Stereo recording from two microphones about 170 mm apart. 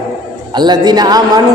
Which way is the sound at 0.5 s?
25° right (ahead or behind).